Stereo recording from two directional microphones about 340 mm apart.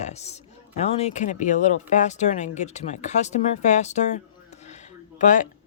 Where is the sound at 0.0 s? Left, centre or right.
Centre.